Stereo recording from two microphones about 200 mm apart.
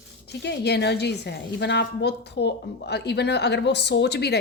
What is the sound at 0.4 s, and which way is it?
A woman's voice, 55° left (ahead or behind).